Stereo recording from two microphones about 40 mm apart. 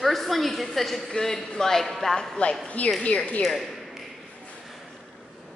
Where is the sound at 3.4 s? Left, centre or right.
Centre.